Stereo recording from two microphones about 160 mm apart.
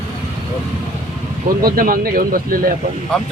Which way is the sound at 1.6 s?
60° right (ahead or behind).